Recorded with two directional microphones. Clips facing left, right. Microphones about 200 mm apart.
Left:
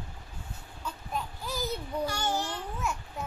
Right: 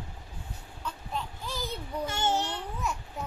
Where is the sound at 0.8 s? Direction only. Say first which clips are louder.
Even; 10° left (ahead or behind).